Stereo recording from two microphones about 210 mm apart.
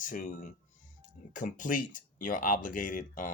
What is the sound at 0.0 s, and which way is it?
Speech, 40° left (ahead or behind).